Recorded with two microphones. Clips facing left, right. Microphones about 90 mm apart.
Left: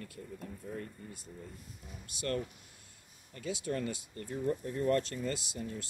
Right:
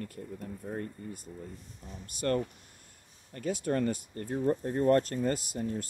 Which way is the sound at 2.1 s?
45° right (ahead or behind).